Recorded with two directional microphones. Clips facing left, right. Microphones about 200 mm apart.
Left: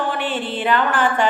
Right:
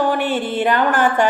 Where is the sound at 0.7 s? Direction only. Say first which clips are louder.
Right 1 dB; 45° right (ahead or behind).